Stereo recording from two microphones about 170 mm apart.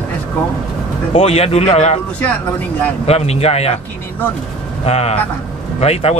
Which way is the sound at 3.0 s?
35° left (ahead or behind).